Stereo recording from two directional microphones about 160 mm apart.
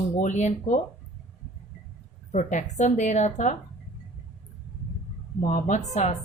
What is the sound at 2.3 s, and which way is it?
Speech, 50° left (ahead or behind).